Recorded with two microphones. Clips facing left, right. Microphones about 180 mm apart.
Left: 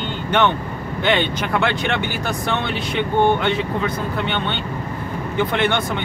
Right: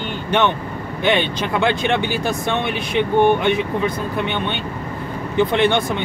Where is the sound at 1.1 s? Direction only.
20° right (ahead or behind).